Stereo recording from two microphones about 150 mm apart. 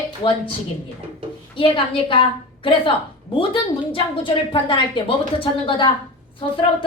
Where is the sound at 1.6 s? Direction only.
35° left (ahead or behind).